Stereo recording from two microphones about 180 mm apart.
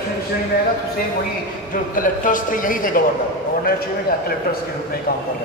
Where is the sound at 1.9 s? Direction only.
50° left (ahead or behind).